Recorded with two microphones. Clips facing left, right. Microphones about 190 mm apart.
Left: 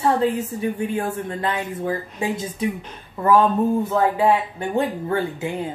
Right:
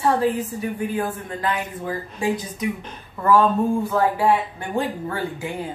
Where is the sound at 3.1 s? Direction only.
20° left (ahead or behind).